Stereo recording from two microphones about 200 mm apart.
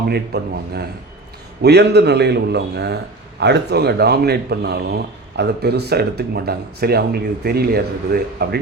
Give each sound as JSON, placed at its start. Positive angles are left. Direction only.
{"t": 0.1, "sound": "a man's voice", "side_deg": -55}